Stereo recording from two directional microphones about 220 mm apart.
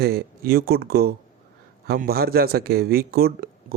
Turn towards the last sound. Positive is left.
turn(degrees=-45)  # may be behind; listen again after turning